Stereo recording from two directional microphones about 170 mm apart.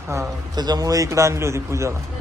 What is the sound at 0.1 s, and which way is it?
A man's voice, 20° right (ahead or behind).